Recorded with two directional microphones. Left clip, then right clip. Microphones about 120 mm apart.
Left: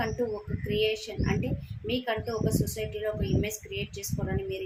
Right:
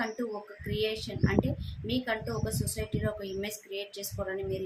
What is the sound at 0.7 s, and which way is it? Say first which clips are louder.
A woman's voice: left 4 dB; 20° right (ahead or behind).